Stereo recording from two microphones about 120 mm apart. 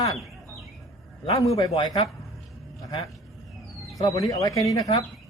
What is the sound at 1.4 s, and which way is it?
Speech, 25° left (ahead or behind).